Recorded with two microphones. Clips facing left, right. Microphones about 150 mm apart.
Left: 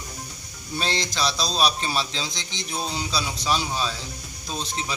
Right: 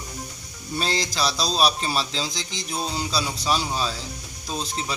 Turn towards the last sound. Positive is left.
turn(degrees=0)  # may be behind; listen again after turning